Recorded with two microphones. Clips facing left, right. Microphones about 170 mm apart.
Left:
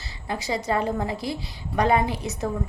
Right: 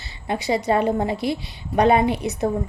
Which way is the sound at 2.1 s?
65° right (ahead or behind).